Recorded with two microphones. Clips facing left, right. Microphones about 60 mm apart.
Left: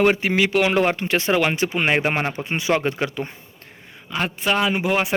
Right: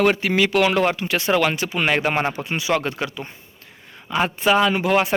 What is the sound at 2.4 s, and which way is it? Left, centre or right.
Speech, left.